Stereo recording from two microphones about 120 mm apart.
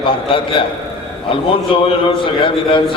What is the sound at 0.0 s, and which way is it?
Speech, 45° left (ahead or behind).